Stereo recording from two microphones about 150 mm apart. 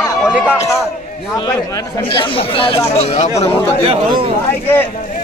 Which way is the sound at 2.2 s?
35° left (ahead or behind).